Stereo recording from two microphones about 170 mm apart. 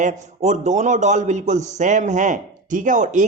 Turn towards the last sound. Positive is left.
turn(degrees=-45)  # may be behind; listen again after turning